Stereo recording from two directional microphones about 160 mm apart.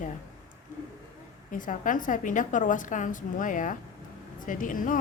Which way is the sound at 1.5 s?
55° left (ahead or behind).